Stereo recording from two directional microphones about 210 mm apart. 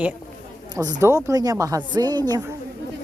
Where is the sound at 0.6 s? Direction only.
20° right (ahead or behind).